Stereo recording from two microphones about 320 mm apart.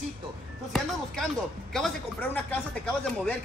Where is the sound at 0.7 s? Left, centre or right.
Centre.